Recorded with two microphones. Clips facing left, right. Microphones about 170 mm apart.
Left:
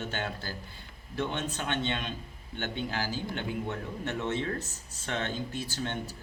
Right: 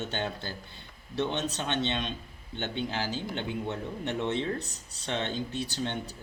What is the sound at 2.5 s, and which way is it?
Speech, 20° right (ahead or behind).